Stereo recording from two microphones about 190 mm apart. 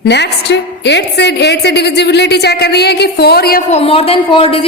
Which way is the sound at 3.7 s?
30° left (ahead or behind).